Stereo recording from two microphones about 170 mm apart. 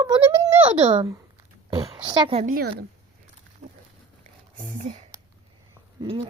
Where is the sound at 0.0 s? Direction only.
25° right (ahead or behind).